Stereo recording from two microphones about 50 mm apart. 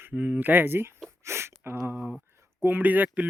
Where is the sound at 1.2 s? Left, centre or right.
Right.